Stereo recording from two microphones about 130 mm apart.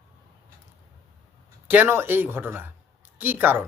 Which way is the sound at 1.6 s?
15° right (ahead or behind).